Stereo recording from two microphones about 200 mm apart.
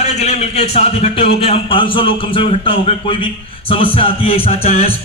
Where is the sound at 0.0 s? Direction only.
35° left (ahead or behind).